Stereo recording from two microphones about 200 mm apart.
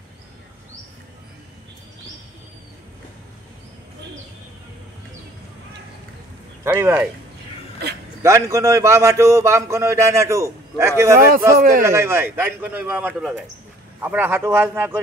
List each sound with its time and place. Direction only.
6.6 s speech: 10° right (ahead or behind)
8.2 s a man's voice: 15° right (ahead or behind)
11.1 s a man's voice: 45° right (ahead or behind)
11.8 s a man's voice: 10° right (ahead or behind)